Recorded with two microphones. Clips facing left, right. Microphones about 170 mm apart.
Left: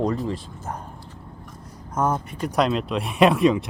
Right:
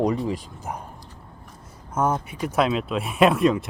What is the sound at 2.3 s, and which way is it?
Speech, 5° right (ahead or behind).